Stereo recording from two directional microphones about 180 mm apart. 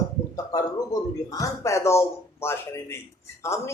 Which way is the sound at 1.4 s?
15° left (ahead or behind).